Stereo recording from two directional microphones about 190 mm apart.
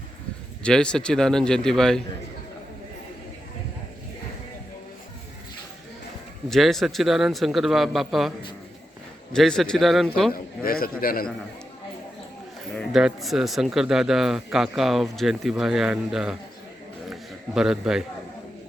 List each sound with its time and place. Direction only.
0.6 s speech: 5° left (ahead or behind)
6.5 s speech: centre (ahead or behind)
9.3 s speech: centre (ahead or behind)
10.3 s a man's voice: 50° left (ahead or behind)
12.7 s speech: centre (ahead or behind)
17.1 s a sound: centre (ahead or behind)